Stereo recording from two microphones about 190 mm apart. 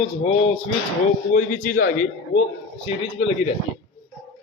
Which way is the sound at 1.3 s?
45° left (ahead or behind).